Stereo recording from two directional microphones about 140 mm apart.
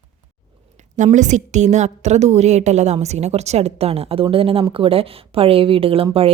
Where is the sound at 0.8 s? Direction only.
60° right (ahead or behind).